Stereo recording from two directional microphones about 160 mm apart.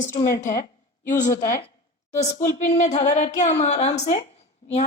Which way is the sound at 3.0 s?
45° left (ahead or behind).